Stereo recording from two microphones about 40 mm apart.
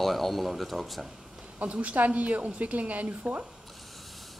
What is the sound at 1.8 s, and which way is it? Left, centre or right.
A woman's voice, right.